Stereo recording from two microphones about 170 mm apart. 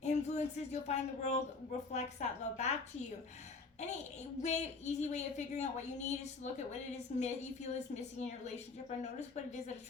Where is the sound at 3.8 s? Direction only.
45° left (ahead or behind).